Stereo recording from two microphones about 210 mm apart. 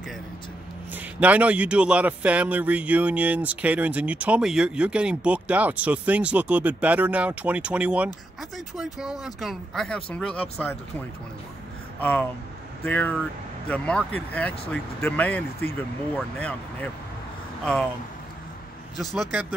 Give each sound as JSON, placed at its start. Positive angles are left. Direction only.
{"t": 0.9, "sound": "a man's voice", "side_deg": -5}
{"t": 12.0, "sound": "speech", "side_deg": 10}
{"t": 18.9, "sound": "speech", "side_deg": 0}